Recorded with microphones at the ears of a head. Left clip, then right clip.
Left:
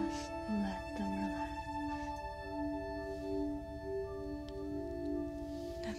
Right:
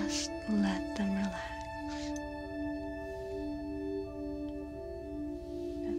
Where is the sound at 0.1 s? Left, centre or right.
Right.